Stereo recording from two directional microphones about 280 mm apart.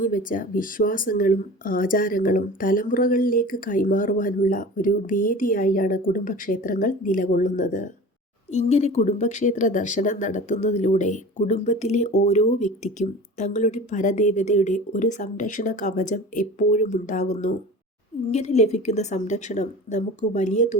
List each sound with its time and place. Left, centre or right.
0.0 s speech: left